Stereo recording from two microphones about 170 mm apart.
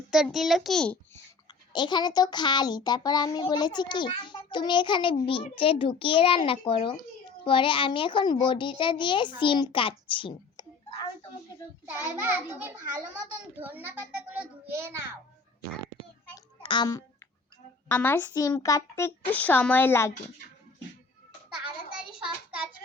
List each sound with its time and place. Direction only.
0.1 s a child's voice: 5° right (ahead or behind)
1.7 s a child's voice: 25° left (ahead or behind)
11.9 s a child's voice: 10° right (ahead or behind)
16.3 s a sound: 25° left (ahead or behind)
17.8 s a child's voice: 10° left (ahead or behind)